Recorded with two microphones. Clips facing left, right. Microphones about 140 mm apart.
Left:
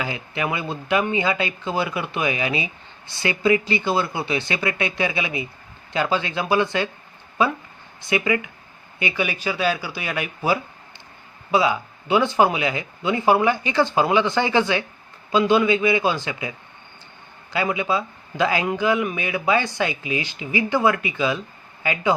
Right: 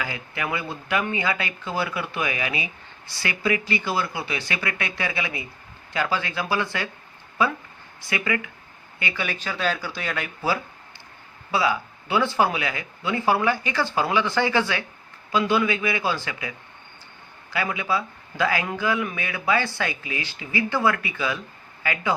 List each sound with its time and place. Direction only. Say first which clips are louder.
0.0 s a man's voice: left 4 dB; 20° left (ahead or behind)
8.0 s a man's voice: left 5 dB; 20° left (ahead or behind)